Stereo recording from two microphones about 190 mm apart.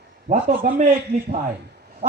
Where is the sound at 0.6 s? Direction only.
45° right (ahead or behind).